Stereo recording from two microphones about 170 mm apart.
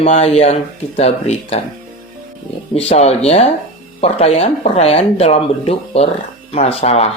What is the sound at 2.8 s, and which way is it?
Speech, 40° left (ahead or behind).